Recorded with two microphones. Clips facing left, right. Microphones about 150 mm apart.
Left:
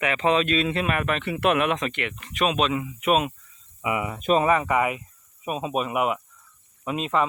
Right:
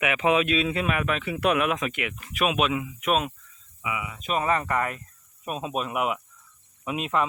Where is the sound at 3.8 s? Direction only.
35° left (ahead or behind).